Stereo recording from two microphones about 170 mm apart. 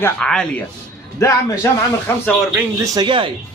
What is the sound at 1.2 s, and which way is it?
Speech, 20° left (ahead or behind).